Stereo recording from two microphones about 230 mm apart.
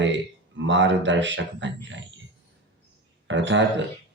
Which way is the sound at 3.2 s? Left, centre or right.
Right.